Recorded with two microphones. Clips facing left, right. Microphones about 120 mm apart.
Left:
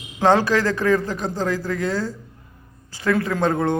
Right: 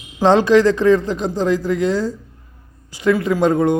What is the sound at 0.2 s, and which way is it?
A man's voice, 20° right (ahead or behind).